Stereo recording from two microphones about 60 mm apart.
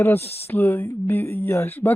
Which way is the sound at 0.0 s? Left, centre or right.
Left.